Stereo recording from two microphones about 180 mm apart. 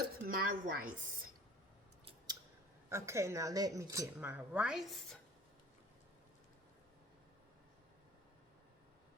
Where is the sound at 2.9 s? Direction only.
15° right (ahead or behind).